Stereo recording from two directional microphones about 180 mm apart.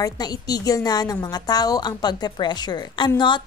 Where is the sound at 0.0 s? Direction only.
20° left (ahead or behind).